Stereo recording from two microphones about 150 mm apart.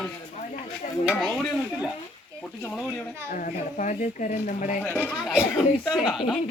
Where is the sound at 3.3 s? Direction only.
65° left (ahead or behind).